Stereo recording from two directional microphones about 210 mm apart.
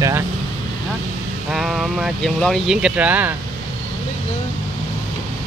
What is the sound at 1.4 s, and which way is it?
Speech, centre (ahead or behind).